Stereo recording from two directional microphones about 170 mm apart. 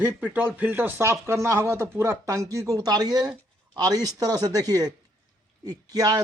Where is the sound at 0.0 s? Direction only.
10° right (ahead or behind).